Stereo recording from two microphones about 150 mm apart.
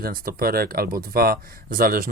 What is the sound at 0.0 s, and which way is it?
Speech, 75° right (ahead or behind).